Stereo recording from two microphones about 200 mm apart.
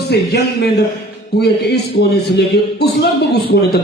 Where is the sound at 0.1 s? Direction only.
55° left (ahead or behind).